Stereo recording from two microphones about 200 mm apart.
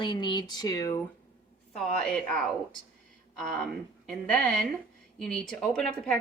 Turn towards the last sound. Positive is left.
turn(degrees=5)  # may be behind; listen again after turning